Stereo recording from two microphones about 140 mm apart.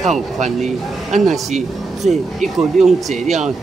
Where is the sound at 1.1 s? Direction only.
55° right (ahead or behind).